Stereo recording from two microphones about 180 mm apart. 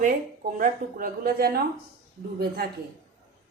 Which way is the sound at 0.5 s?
50° right (ahead or behind).